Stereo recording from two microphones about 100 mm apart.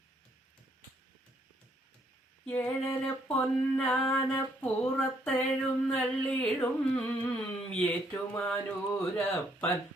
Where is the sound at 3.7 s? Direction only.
20° left (ahead or behind).